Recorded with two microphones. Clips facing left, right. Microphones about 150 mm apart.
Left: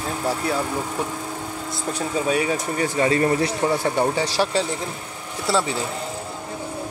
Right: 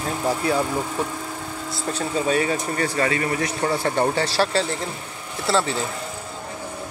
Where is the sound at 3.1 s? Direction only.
30° left (ahead or behind).